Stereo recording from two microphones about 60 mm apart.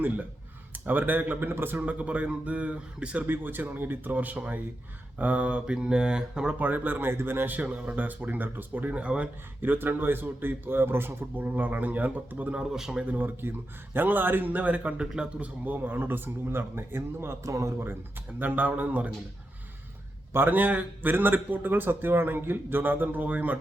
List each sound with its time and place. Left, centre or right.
0.7 s speech: right
1.8 s speech: right
3.2 s speech: right; by 6.6 s centre
6.6 s speech: right
12.5 s speech: centre
13.1 s speech: right; by 15.3 s centre
15.4 s speech: right
17.4 s speech: right
18.3 s speech: right
20.3 s speech: right